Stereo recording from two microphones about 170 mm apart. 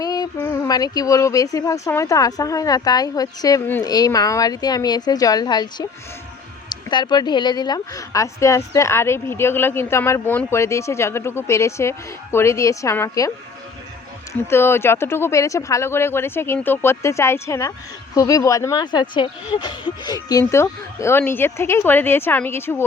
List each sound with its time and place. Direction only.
0.0 s speech: 20° left (ahead or behind)
6.9 s speech: 25° left (ahead or behind)
14.5 s speech: 15° left (ahead or behind)